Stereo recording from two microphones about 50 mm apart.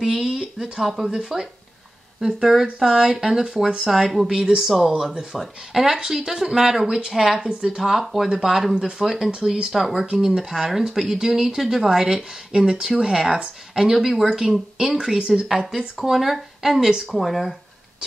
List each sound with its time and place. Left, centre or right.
0.0 s a sound: centre
1.1 s speech: centre
8.7 s speech: centre
9.0 s speech: centre
9.3 s speech: centre
14.4 s speech: centre